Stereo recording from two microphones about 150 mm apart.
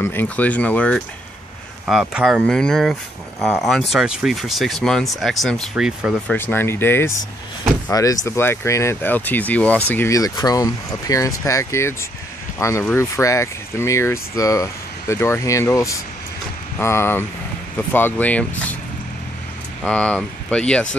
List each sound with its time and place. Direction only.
0.0 s speech: 15° left (ahead or behind)
1.9 s speech: 5° right (ahead or behind)
6.2 s speech: 15° left (ahead or behind)
19.8 s speech: 5° left (ahead or behind)